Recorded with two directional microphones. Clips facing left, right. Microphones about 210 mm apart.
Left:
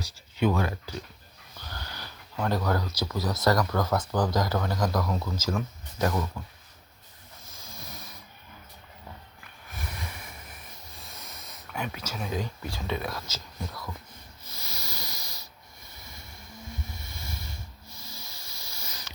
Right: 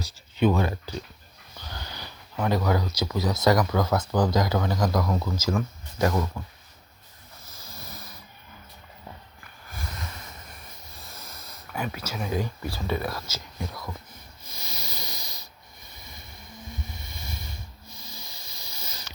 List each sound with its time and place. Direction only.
0.0 s speech: 20° right (ahead or behind)
1.5 s sniff: 15° right (ahead or behind)
2.5 s speech: 10° right (ahead or behind)
7.5 s snoring: centre (ahead or behind)
11.0 s speech: centre (ahead or behind)
14.4 s hiss: 15° right (ahead or behind)
16.0 s a sound: 15° right (ahead or behind)
16.8 s hiss: 15° right (ahead or behind)